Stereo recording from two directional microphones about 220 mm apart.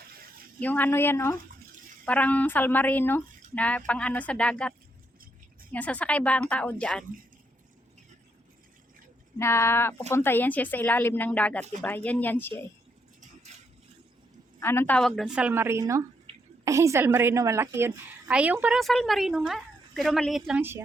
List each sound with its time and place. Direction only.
0.6 s a woman's voice: 10° left (ahead or behind)
5.7 s a woman's voice: 5° left (ahead or behind)
9.4 s a woman's voice: 10° left (ahead or behind)
13.5 s a sound: 30° right (ahead or behind)
14.6 s a woman's voice: 10° left (ahead or behind); by 16.0 s 15° right (ahead or behind)
16.3 s a sound: 30° right (ahead or behind)
16.6 s a woman's voice: 15° right (ahead or behind)